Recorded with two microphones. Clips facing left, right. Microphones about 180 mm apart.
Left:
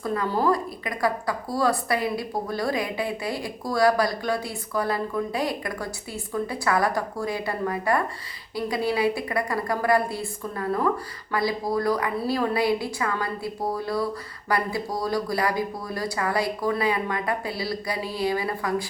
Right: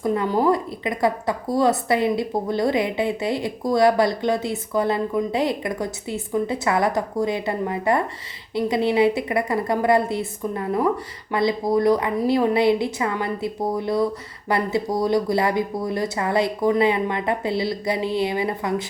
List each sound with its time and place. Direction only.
0.0 s a woman's voice: 20° right (ahead or behind)